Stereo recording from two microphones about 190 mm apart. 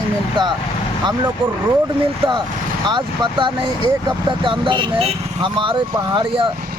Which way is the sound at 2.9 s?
25° right (ahead or behind).